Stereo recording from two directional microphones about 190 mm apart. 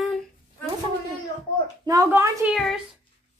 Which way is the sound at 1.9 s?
15° right (ahead or behind).